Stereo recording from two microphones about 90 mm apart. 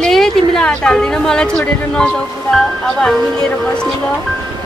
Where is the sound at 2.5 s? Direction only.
5° left (ahead or behind).